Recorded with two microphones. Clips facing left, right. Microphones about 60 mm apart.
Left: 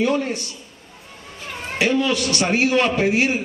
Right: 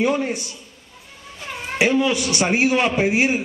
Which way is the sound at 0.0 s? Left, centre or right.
Centre.